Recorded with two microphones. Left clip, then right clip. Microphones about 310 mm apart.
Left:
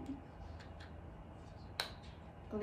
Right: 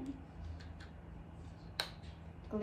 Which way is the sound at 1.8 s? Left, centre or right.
Centre.